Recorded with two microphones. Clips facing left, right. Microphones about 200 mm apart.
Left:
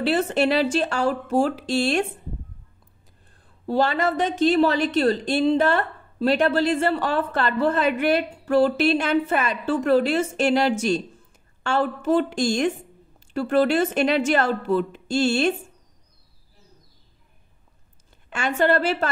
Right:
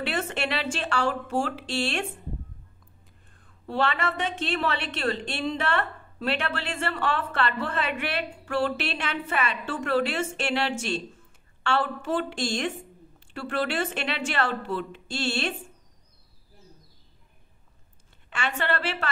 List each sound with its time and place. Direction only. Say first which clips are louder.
0.0 s a woman's voice: left 9 dB; 35° left (ahead or behind)
3.3 s a woman's voice: left 6 dB; 40° left (ahead or behind)
18.3 s a woman's voice: left 8 dB; 45° left (ahead or behind)